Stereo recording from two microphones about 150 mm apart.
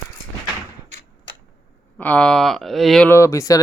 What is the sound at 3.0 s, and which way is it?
Speech, 20° left (ahead or behind).